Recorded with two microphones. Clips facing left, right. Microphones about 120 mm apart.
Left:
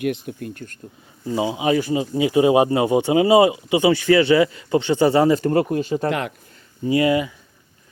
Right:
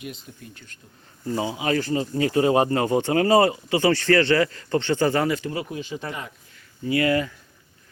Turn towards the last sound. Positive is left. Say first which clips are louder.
# left 4 dB
turn(degrees=15)  # may be behind; listen again after turning